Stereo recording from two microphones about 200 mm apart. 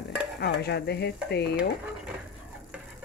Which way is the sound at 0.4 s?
55° left (ahead or behind).